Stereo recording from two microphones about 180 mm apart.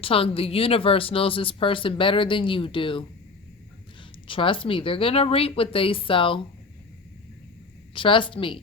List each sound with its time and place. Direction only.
0.0 s speech: 30° left (ahead or behind)
4.3 s speech: 30° left (ahead or behind)
7.9 s speech: 30° left (ahead or behind)